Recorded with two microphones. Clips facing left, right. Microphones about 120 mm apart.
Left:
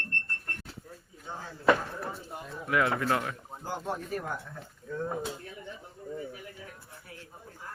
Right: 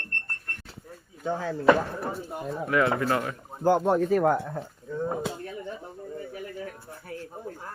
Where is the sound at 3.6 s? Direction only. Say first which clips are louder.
Right 14 dB; 65° right (ahead or behind).